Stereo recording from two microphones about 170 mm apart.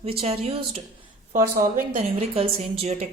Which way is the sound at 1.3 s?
55° right (ahead or behind).